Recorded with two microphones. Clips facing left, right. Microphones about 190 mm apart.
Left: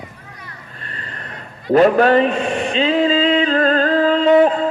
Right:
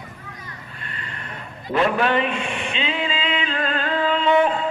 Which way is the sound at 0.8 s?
35° left (ahead or behind).